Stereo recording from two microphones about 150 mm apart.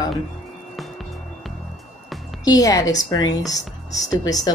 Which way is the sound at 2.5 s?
25° left (ahead or behind).